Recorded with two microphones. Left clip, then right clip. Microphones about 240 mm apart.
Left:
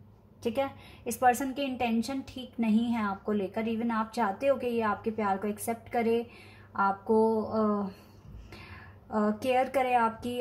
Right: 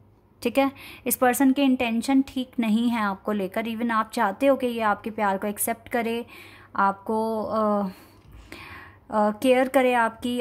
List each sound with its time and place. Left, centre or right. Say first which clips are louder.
1.0 s a woman's voice: right 5 dB; right
9.1 s a woman's voice: right 7 dB; right